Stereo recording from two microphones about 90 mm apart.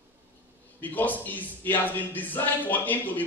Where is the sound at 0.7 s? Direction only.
20° left (ahead or behind).